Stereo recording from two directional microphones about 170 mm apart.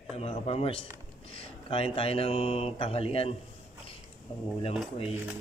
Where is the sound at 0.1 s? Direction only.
35° left (ahead or behind).